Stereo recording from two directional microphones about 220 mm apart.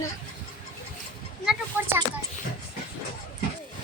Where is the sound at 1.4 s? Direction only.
10° right (ahead or behind).